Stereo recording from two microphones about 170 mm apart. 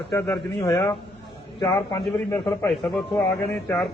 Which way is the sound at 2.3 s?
10° left (ahead or behind).